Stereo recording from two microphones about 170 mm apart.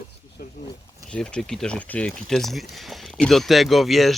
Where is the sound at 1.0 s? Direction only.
5° left (ahead or behind).